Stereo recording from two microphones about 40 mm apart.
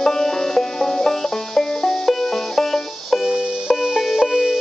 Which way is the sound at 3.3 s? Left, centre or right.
Right.